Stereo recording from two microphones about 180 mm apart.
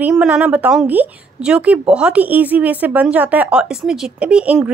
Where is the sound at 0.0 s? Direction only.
5° right (ahead or behind).